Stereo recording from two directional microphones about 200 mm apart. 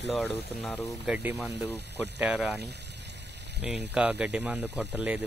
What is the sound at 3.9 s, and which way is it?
Speech, 5° right (ahead or behind).